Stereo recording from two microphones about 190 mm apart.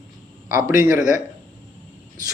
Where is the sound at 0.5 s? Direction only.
45° left (ahead or behind).